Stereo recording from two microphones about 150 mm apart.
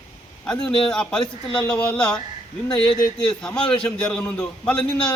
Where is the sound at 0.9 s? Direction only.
5° left (ahead or behind).